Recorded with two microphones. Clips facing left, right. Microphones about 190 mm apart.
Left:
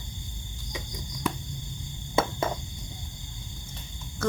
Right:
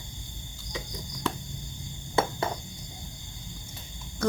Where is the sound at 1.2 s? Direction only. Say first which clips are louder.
Left 1 dB; 15° left (ahead or behind).